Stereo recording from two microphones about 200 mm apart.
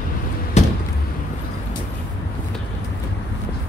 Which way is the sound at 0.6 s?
35° left (ahead or behind).